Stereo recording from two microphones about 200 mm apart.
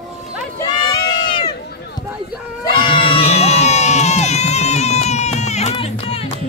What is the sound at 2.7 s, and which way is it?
Crowd, 25° left (ahead or behind).